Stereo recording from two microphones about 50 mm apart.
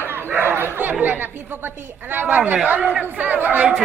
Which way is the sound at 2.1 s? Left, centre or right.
Right.